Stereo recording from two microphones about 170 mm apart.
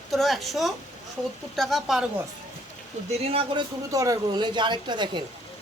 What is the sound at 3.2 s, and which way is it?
Speech, 35° right (ahead or behind).